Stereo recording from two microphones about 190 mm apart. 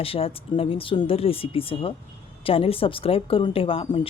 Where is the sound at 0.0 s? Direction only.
30° left (ahead or behind).